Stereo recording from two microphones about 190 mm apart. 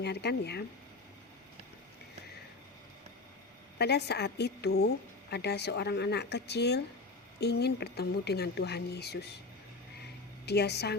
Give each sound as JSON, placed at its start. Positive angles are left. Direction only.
{"t": 0.0, "sound": "a woman's voice", "side_deg": 60}
{"t": 3.8, "sound": "a woman's voice", "side_deg": 60}
{"t": 10.4, "sound": "a woman's voice", "side_deg": 60}